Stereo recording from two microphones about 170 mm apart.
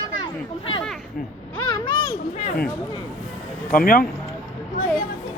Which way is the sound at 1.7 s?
25° left (ahead or behind).